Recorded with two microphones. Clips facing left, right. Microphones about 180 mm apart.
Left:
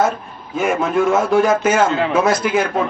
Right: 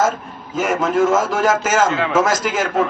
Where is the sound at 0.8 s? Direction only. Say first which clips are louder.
Right 1 dB; 45° right (ahead or behind).